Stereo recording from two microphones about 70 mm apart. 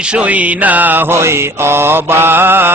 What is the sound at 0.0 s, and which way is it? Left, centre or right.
Mantra, centre.